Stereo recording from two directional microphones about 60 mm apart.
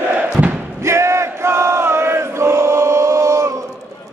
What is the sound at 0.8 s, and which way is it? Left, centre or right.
Chant, right.